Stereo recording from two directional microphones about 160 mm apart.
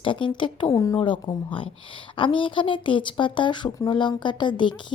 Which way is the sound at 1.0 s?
30° left (ahead or behind).